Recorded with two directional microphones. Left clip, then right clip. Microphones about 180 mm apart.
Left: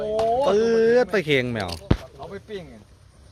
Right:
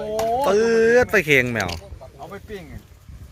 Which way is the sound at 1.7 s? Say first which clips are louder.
Left 8 dB; 45° left (ahead or behind).